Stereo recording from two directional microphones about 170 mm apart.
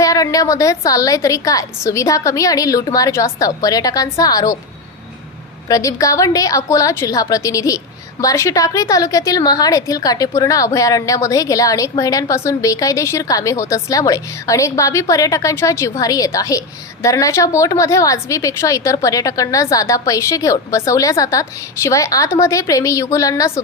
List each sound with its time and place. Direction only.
0.0 s a woman's voice: 20° left (ahead or behind)
5.6 s a woman's voice: 20° left (ahead or behind)